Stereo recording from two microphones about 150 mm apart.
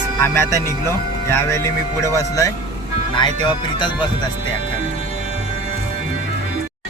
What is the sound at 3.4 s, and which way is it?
Speech, 30° left (ahead or behind).